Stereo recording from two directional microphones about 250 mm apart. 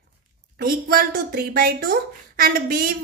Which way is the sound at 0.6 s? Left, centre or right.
Right.